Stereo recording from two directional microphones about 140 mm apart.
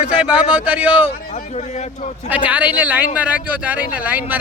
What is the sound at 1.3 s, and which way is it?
Speech, 50° left (ahead or behind).